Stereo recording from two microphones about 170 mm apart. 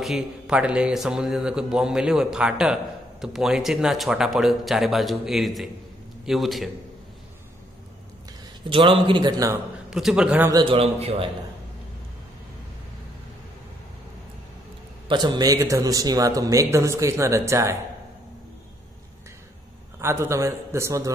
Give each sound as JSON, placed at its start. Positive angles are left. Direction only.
{"t": 0.0, "sound": "speech", "side_deg": -5}
{"t": 8.6, "sound": "a man's voice", "side_deg": -30}
{"t": 9.8, "sound": "speech", "side_deg": -5}
{"t": 10.5, "sound": "a man's voice", "side_deg": -30}
{"t": 15.0, "sound": "a man's voice", "side_deg": -25}
{"t": 20.0, "sound": "a man's voice", "side_deg": -15}